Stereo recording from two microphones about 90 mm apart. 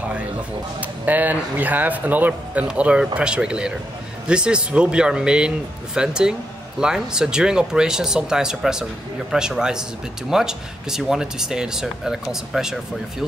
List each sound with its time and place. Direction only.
0.7 s speech: 20° right (ahead or behind)